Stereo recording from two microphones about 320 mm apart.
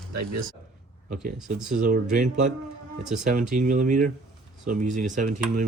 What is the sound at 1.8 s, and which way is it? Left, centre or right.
Speech, right.